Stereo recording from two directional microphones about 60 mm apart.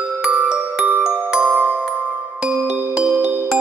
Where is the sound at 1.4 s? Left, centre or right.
Right.